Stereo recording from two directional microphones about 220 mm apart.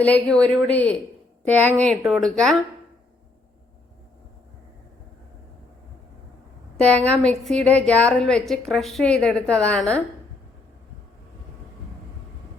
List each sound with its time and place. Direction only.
0.0 s a woman's voice: 5° left (ahead or behind)
6.7 s a woman's voice: 5° left (ahead or behind)